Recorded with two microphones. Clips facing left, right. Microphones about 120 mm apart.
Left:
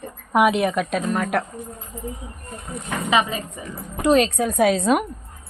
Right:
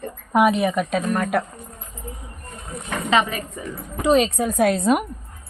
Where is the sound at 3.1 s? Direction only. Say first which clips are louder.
Right 1 dB; 20° left (ahead or behind).